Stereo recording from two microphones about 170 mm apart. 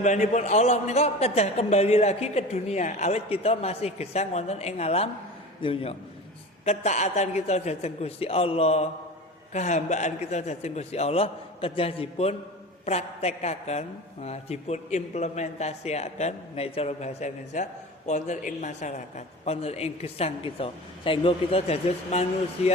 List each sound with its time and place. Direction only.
0.0 s a man's voice: 45° left (ahead or behind)